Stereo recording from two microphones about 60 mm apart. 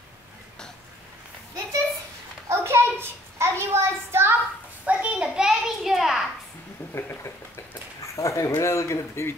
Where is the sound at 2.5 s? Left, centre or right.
Right.